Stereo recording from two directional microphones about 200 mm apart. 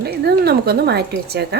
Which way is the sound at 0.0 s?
50° right (ahead or behind).